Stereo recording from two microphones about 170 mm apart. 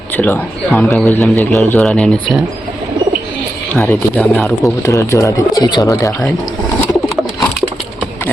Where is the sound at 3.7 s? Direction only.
10° left (ahead or behind).